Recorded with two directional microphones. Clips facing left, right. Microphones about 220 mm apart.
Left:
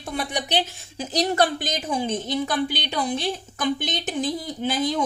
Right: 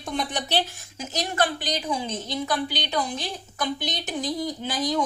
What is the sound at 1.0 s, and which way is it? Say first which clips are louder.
A woman's voice: left 5 dB; 35° left (ahead or behind).